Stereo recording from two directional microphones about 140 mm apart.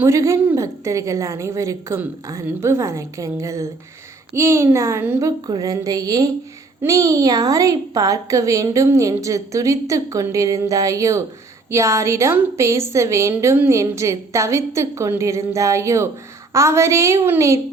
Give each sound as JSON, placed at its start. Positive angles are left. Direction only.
{"t": 0.0, "sound": "a woman's voice", "side_deg": -20}